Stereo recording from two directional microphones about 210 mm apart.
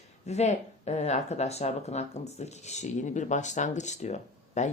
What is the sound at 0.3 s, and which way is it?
Speech, 30° left (ahead or behind).